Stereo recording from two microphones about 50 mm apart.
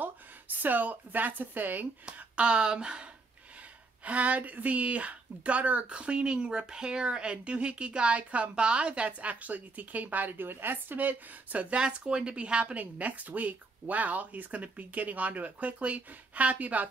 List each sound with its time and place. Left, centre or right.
0.0 s a woman's voice: right
2.0 s speech: right
11.7 s speech: right